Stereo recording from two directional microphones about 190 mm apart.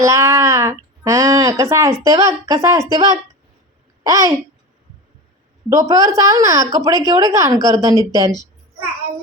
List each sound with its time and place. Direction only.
0.0 s speech: 15° right (ahead or behind)
5.6 s speech: 15° right (ahead or behind)